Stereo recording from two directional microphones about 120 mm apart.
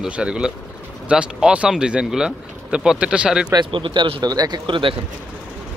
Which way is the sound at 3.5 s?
40° right (ahead or behind).